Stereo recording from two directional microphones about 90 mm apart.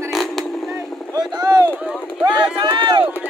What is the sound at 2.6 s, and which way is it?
Run, 60° right (ahead or behind).